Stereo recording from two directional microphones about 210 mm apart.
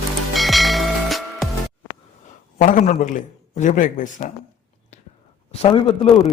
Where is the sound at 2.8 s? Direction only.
35° left (ahead or behind).